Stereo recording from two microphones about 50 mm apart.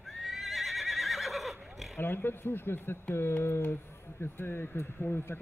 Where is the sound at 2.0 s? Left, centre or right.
Left.